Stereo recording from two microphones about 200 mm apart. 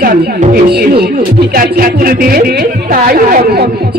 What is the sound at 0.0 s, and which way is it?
Speech, 45° right (ahead or behind).